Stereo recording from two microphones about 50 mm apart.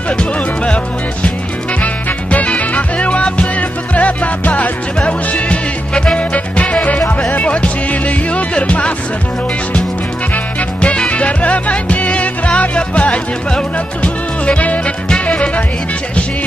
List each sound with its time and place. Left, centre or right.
2.3 s music: left
10.3 s music: left